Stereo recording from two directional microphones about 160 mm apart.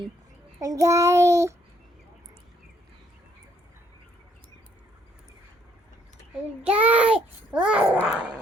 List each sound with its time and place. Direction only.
0.6 s child singing: 20° right (ahead or behind)
6.6 s a child's voice: 10° right (ahead or behind)